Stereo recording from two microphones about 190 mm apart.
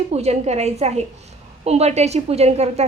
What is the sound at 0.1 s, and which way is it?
A woman's voice, 35° right (ahead or behind).